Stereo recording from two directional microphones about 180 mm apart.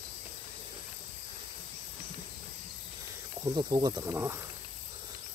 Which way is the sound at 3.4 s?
20° right (ahead or behind).